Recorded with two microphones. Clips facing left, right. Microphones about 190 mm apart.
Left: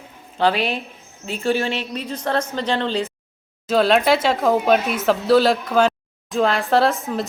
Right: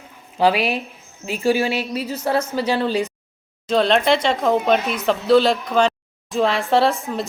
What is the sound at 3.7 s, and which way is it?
A woman's voice, 5° left (ahead or behind).